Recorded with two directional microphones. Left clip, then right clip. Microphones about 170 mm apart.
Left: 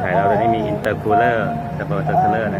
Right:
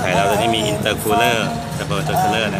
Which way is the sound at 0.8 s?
15° right (ahead or behind).